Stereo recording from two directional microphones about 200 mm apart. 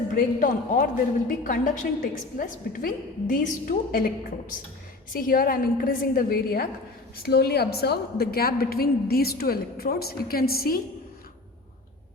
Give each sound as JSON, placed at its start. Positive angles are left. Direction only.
{"t": 0.1, "sound": "a man's voice", "side_deg": 40}
{"t": 5.1, "sound": "a woman's voice", "side_deg": 45}